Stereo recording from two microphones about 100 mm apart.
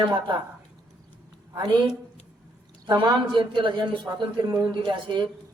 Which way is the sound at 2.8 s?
50° right (ahead or behind).